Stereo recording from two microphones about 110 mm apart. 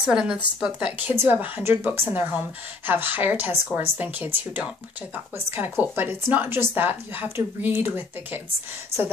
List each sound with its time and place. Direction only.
0.0 s a woman's voice: 5° right (ahead or behind)